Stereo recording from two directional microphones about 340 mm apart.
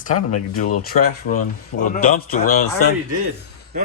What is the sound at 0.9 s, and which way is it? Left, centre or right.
Speech, left.